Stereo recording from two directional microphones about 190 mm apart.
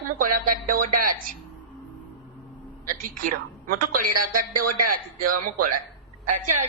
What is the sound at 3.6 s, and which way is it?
A woman's voice, 50° right (ahead or behind).